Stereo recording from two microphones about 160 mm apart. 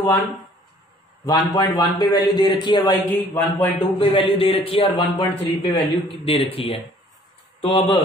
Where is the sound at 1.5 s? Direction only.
25° left (ahead or behind).